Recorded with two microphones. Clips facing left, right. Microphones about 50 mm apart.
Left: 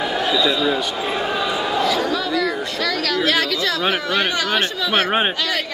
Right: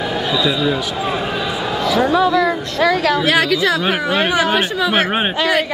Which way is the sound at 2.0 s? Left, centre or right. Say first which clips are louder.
Right 6 dB; right.